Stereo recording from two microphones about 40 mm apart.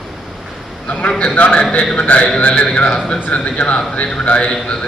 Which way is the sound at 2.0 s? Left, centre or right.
Left.